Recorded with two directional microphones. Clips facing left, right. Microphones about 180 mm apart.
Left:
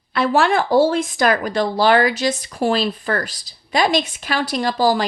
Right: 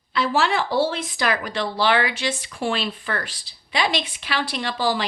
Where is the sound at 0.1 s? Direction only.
55° left (ahead or behind).